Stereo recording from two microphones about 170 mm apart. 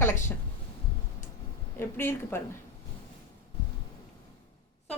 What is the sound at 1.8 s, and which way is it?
Speech, 15° left (ahead or behind).